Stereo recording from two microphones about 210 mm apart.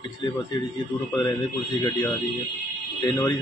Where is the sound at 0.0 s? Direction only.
20° left (ahead or behind).